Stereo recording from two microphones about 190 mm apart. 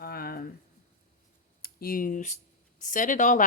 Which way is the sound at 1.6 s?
50° left (ahead or behind).